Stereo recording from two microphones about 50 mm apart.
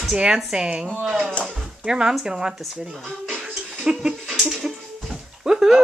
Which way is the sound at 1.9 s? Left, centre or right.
Centre.